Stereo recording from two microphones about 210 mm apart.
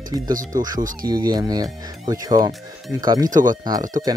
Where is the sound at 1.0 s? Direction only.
20° right (ahead or behind).